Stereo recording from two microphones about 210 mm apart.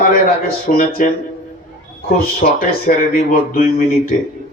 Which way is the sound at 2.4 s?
45° left (ahead or behind).